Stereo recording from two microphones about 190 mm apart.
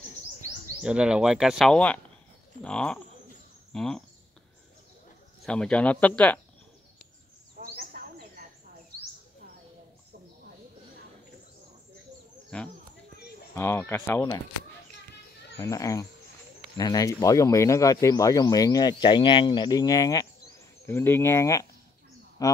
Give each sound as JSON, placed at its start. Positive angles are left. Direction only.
{"t": 0.8, "sound": "speech", "side_deg": -5}
{"t": 5.4, "sound": "speech", "side_deg": 5}
{"t": 7.5, "sound": "a sound", "side_deg": -45}
{"t": 12.5, "sound": "speech", "side_deg": 5}
{"t": 15.5, "sound": "speech", "side_deg": 15}